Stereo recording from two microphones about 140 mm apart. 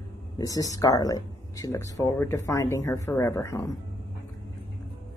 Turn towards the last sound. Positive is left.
turn(degrees=20)  # may be behind; listen again after turning